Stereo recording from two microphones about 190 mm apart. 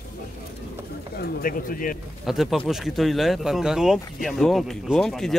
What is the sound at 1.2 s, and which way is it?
Speech, 50° left (ahead or behind).